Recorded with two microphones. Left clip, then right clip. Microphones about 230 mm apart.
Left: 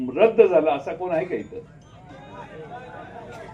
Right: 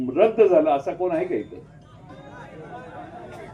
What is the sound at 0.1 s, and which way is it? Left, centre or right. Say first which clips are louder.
A man's voice: left 1 dB; right.